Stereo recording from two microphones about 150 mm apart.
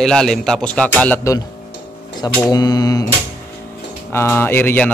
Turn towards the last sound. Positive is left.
turn(degrees=15)  # may be behind; listen again after turning